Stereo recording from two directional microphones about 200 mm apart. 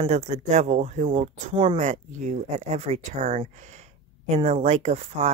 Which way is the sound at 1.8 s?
35° right (ahead or behind).